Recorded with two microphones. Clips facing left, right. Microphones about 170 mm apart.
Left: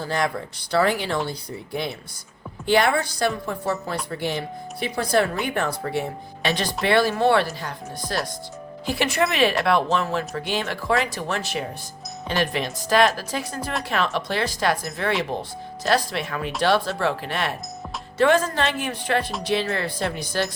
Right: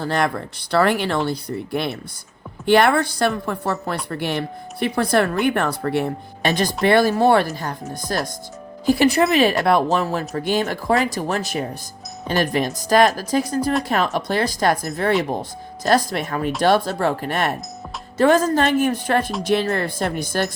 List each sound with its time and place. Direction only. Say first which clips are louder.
0.0 s a woman's voice: right 3 dB; 60° right (ahead or behind)
6.5 s a woman's voice: right 4 dB; 45° right (ahead or behind)